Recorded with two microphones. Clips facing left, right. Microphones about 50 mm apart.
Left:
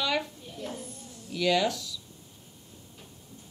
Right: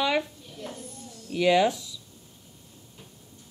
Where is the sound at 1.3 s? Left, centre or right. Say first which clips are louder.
Right 4 dB; right.